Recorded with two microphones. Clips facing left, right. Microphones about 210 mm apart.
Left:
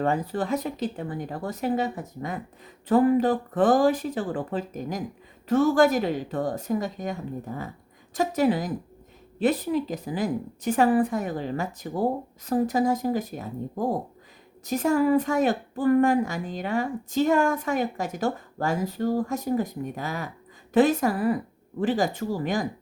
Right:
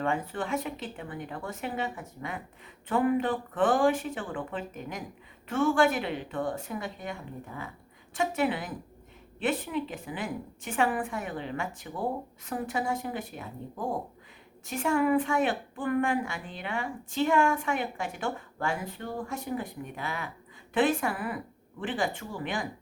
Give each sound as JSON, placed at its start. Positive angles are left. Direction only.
{"t": 0.0, "sound": "a woman's voice", "side_deg": 40}